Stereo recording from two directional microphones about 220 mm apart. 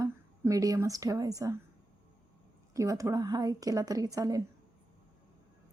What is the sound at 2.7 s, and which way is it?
A woman's voice, 15° right (ahead or behind).